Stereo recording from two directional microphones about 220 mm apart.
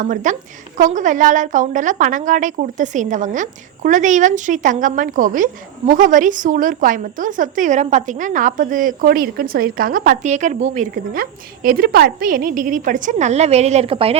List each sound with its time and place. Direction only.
0.0 s a woman's voice: 35° right (ahead or behind)